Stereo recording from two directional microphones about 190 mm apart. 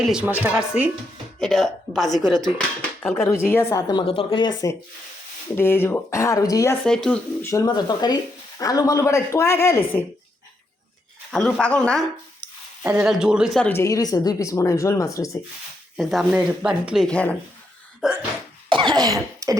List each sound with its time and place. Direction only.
0.0 s a woman's voice: 5° right (ahead or behind)
3.2 s a woman's voice: 15° left (ahead or behind)
6.8 s speech: 5° left (ahead or behind)
7.5 s speech: 20° left (ahead or behind)
11.3 s speech: 5° left (ahead or behind)
13.6 s speech: 10° left (ahead or behind)
16.0 s speech: centre (ahead or behind)
18.0 s a woman's voice: 5° right (ahead or behind)
18.7 s cough: 25° right (ahead or behind)